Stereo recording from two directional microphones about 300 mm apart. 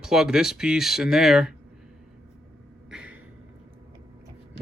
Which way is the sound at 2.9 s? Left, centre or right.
Centre.